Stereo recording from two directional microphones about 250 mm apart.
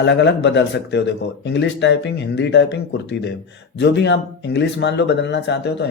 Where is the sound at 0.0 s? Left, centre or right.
Left.